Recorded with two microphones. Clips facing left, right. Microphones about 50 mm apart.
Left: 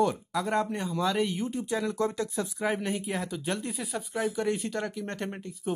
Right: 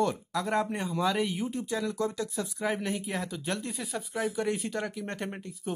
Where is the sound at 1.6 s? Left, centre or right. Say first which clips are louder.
Left 3 dB; left.